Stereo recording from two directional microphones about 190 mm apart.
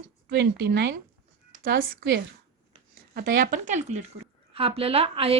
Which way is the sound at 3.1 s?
50° right (ahead or behind).